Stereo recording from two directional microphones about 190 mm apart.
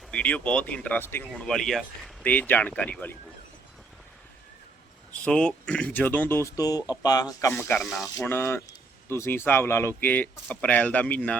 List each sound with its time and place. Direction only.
0.1 s speech: 5° left (ahead or behind)
5.2 s speech: 5° left (ahead or behind)
7.8 s speech: centre (ahead or behind)
8.1 s speech: 15° left (ahead or behind)